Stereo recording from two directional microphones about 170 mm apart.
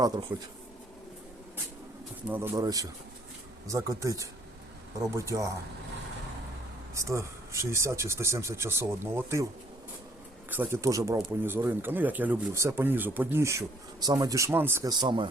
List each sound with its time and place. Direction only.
0.3 s speech: 10° right (ahead or behind)
2.3 s speech: 15° right (ahead or behind)
6.9 s speech: 15° right (ahead or behind)
10.5 s speech: 15° right (ahead or behind)
15.0 s speech: 30° right (ahead or behind)